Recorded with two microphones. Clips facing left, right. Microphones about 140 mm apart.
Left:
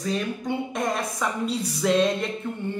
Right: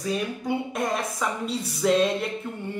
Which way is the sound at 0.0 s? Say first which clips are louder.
Even; 5° right (ahead or behind).